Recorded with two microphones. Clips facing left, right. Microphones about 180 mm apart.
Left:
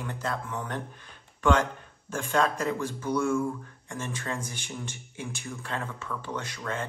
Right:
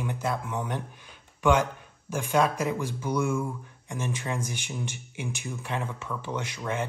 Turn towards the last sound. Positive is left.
turn(degrees=-15)  # may be behind; listen again after turning